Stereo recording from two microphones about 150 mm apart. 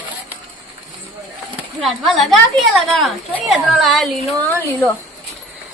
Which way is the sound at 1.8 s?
Centre (ahead or behind).